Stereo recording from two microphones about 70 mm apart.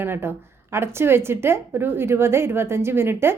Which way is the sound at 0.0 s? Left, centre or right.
Right.